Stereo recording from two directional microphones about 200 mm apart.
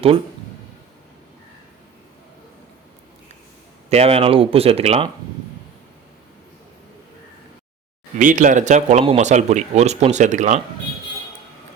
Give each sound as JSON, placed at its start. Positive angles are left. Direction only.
{"t": 3.8, "sound": "speech", "side_deg": -30}
{"t": 8.2, "sound": "speech", "side_deg": -40}